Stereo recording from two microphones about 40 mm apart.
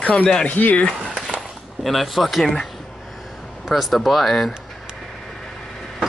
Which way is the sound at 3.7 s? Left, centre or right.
Centre.